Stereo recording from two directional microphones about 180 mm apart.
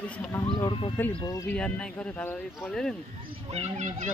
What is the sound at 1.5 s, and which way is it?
Speech, 5° left (ahead or behind).